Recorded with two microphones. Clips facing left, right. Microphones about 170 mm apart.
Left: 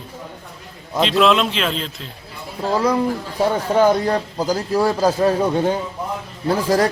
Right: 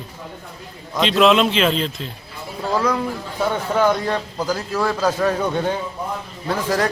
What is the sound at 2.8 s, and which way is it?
A man's voice, 30° left (ahead or behind).